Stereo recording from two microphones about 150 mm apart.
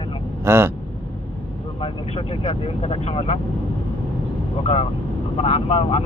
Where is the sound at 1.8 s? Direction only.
40° left (ahead or behind).